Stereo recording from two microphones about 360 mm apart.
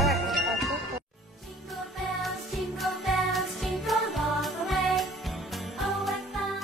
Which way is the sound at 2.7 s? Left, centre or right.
Centre.